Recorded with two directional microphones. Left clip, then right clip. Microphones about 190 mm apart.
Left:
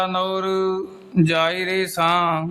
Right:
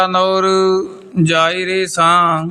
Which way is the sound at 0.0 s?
25° right (ahead or behind).